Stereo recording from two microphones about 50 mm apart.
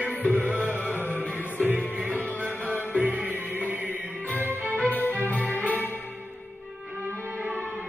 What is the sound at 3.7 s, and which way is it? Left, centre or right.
Music, right.